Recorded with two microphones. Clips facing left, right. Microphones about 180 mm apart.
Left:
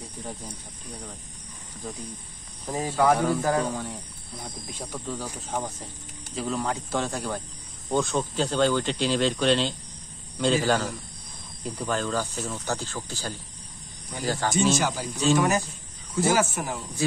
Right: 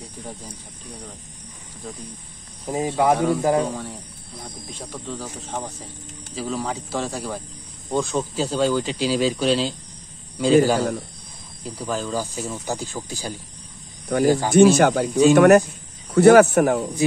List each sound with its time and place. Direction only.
0.0 s snake: centre (ahead or behind)
2.6 s speech: 20° right (ahead or behind)
3.7 s speech: centre (ahead or behind)
14.5 s speech: 60° right (ahead or behind)